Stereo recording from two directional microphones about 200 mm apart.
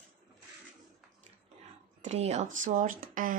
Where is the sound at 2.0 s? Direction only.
35° right (ahead or behind).